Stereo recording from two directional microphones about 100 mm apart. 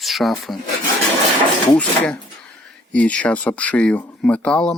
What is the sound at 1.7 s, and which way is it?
Speech, 15° left (ahead or behind).